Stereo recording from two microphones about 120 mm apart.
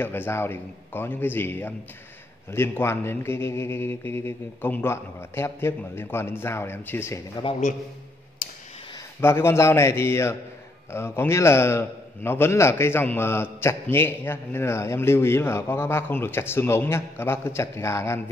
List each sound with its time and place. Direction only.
0.0 s a man's voice: 20° left (ahead or behind)
7.4 s a man's voice: 35° left (ahead or behind)
9.2 s a man's voice: 20° left (ahead or behind)